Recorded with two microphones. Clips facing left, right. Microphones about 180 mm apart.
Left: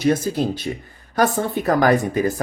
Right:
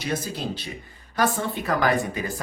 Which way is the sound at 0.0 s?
45° left (ahead or behind).